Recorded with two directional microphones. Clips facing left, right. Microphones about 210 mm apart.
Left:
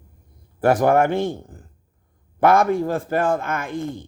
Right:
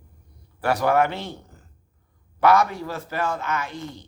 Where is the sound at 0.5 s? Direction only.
50° left (ahead or behind).